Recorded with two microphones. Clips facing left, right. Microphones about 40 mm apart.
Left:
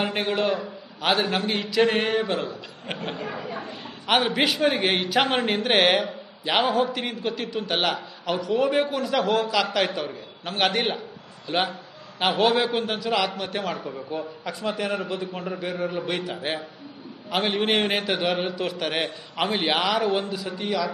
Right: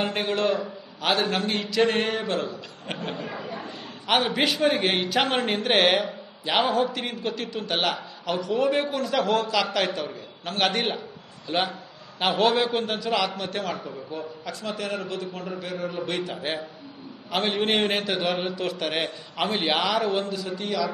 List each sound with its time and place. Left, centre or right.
0.0 s a man's voice: centre
3.4 s a woman's voice: left
4.1 s a man's voice: centre